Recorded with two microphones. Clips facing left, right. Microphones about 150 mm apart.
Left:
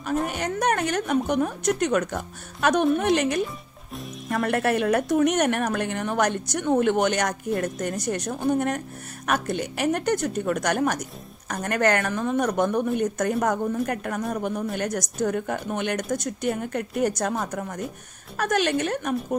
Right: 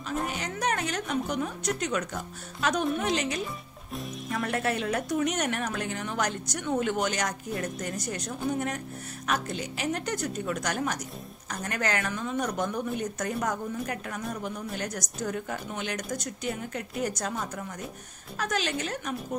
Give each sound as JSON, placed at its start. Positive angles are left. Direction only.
{"t": 0.3, "sound": "speech", "side_deg": 55}